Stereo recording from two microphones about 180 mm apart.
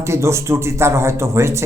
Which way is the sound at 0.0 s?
15° right (ahead or behind).